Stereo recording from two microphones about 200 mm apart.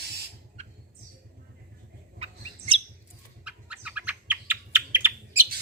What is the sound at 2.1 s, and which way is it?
Bird, 30° right (ahead or behind).